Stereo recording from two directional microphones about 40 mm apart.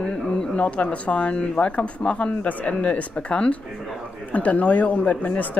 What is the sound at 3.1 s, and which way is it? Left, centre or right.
Speech, left.